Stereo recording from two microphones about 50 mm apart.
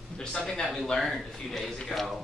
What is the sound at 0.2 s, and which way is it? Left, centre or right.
Speech, centre.